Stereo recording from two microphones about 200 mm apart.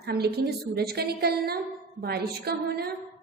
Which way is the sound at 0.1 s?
50° right (ahead or behind).